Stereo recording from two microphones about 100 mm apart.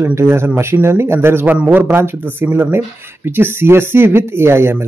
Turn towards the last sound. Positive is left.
turn(degrees=-25)  # may be behind; listen again after turning